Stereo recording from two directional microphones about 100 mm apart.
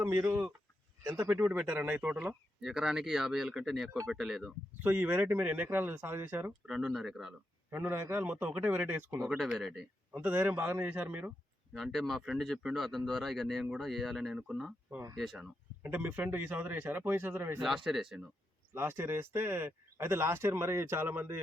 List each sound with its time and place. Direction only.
1.0 s speech: 25° right (ahead or behind); by 4.5 s centre (ahead or behind)
4.8 s speech: 20° right (ahead or behind)
6.7 s speech: 5° right (ahead or behind)
7.7 s a man's voice: 20° right (ahead or behind)
9.4 s speech: centre (ahead or behind)
10.1 s a man's voice: 15° right (ahead or behind)
11.7 s speech: centre (ahead or behind)
15.8 s speech: 20° right (ahead or behind)
17.8 s speech: 5° right (ahead or behind)
18.7 s speech: 25° right (ahead or behind)